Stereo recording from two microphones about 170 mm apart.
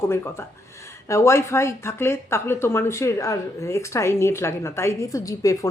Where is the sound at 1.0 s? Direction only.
15° left (ahead or behind).